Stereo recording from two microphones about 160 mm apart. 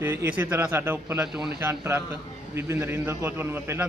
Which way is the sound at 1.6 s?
15° right (ahead or behind).